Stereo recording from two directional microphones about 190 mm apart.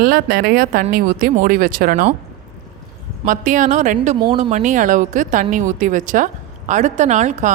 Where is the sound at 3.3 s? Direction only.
45° right (ahead or behind).